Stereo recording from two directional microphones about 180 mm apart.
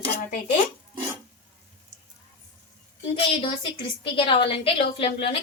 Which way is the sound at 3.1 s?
30° left (ahead or behind).